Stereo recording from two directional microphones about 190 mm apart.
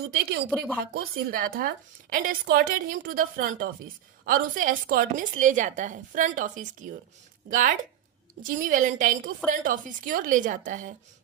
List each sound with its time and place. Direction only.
0.1 s a woman's voice: 55° right (ahead or behind)